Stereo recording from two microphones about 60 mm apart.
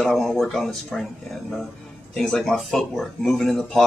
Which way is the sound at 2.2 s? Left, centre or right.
Centre.